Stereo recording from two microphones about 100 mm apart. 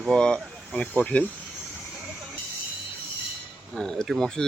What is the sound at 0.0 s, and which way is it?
Speech, 5° left (ahead or behind).